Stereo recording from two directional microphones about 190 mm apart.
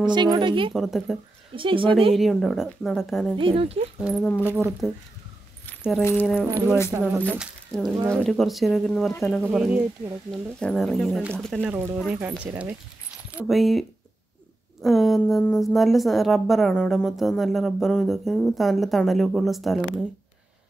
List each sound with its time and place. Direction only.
0.0 s speech: 25° right (ahead or behind)
0.7 s a woman's voice: centre (ahead or behind)
1.5 s speech: 25° right (ahead or behind)
2.1 s a woman's voice: centre (ahead or behind)
3.3 s speech: 30° right (ahead or behind)
4.0 s a woman's voice: centre (ahead or behind)
5.7 s keys jangling: centre (ahead or behind)
6.9 s a woman's voice: 10° right (ahead or behind)
11.6 s a woman's voice: 10° right (ahead or behind)